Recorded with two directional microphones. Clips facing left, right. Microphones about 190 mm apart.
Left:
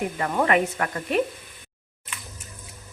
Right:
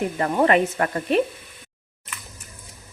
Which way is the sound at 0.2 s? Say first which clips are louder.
Right 3 dB; 30° right (ahead or behind).